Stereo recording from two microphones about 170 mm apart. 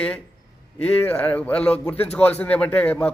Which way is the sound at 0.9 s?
10° left (ahead or behind).